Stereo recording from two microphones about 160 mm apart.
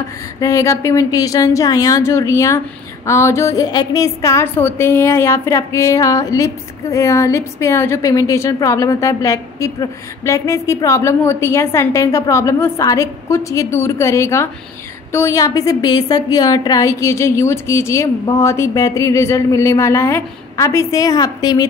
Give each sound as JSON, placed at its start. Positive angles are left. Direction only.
{"t": 0.4, "sound": "a woman's voice", "side_deg": 20}